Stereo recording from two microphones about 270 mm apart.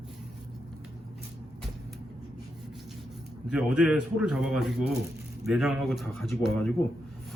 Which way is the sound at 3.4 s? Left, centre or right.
Centre.